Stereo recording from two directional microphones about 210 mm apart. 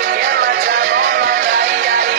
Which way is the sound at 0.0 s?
50° right (ahead or behind).